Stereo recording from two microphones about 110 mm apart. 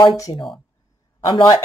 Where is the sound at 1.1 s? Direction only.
50° left (ahead or behind).